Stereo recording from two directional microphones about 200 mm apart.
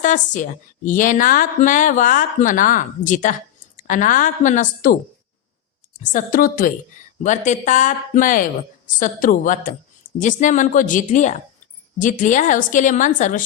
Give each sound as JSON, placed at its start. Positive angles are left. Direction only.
{"t": 0.9, "sound": "speech", "side_deg": 40}
{"t": 6.0, "sound": "a woman's voice", "side_deg": 40}